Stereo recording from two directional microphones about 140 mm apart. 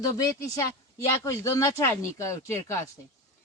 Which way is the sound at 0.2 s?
25° left (ahead or behind).